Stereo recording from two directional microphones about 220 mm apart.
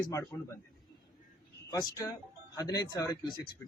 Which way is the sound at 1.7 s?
15° left (ahead or behind).